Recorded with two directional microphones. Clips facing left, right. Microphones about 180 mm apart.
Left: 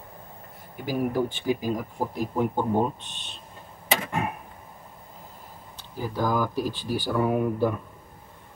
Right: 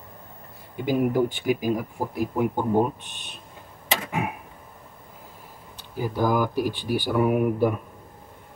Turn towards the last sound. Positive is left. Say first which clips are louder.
# right 2 dB
turn(degrees=-15)  # may be behind; listen again after turning